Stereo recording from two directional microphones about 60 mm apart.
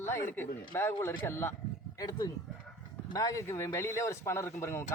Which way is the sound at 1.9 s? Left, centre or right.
Left.